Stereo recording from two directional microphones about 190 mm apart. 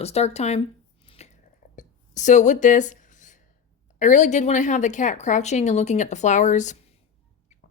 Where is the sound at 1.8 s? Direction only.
40° left (ahead or behind).